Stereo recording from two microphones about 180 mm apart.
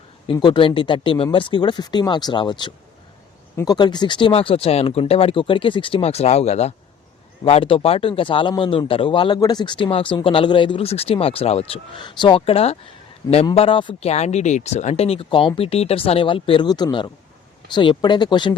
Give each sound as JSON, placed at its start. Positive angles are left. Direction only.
{"t": 0.3, "sound": "a man's voice", "side_deg": 25}